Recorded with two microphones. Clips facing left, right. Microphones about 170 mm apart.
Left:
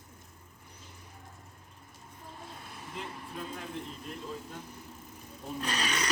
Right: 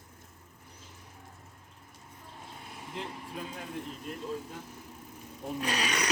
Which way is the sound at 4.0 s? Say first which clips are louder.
Right 3 dB; 5° right (ahead or behind).